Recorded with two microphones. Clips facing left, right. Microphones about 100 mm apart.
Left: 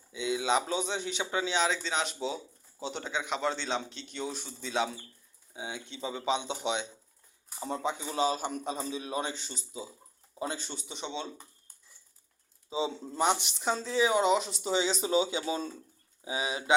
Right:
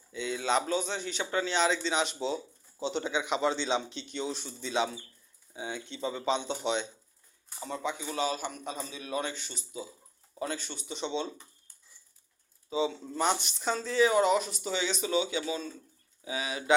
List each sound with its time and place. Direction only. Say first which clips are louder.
0.1 s a man's voice: left 1 dB; 10° left (ahead or behind)
7.6 s a man's voice: left 2 dB; 30° left (ahead or behind)
10.8 s a man's voice: right 7 dB; 15° left (ahead or behind)
12.7 s a man's voice: right 2 dB; 25° left (ahead or behind)
16.2 s a man's voice: even; 25° left (ahead or behind)